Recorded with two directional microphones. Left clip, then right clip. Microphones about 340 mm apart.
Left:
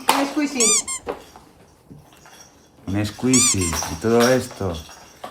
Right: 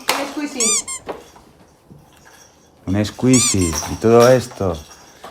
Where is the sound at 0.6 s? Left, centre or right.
Centre.